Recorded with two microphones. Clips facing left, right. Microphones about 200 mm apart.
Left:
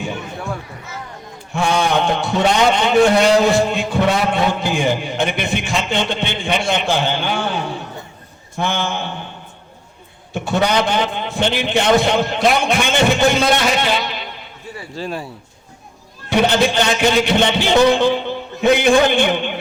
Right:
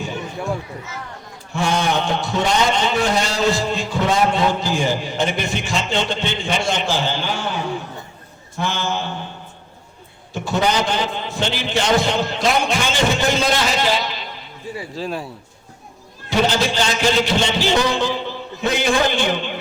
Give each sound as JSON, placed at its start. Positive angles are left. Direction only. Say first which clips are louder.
{"t": 1.5, "sound": "a man's voice", "louder": "left 3 dB", "side_deg": 55}
{"t": 8.5, "sound": "a man's voice", "louder": "left 2 dB", "side_deg": 55}
{"t": 10.3, "sound": "a man's voice", "louder": "left 2 dB", "side_deg": 55}
{"t": 14.9, "sound": "speech", "louder": "left 2 dB", "side_deg": 0}
{"t": 16.3, "sound": "a man's voice", "louder": "left 3 dB", "side_deg": 60}